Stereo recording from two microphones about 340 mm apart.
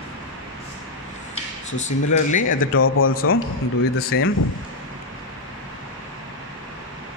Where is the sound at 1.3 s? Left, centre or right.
Left.